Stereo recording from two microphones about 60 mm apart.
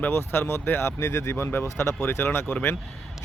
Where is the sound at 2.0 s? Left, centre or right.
Left.